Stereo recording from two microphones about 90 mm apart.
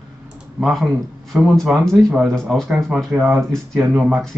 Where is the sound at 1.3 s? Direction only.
5° left (ahead or behind).